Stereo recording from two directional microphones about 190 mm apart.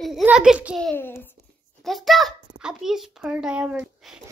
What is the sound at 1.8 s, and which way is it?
A child's voice, centre (ahead or behind).